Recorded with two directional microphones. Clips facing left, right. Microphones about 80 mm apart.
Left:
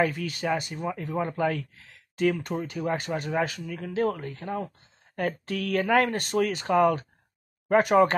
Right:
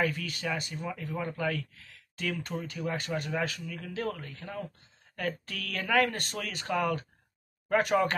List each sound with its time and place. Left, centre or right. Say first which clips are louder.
0.0 s speech: left 5 dB; left
0.7 s speech: left 6 dB; left